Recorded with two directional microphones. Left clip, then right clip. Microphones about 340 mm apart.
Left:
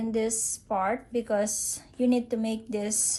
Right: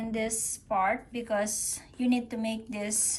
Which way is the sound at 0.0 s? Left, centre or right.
Centre.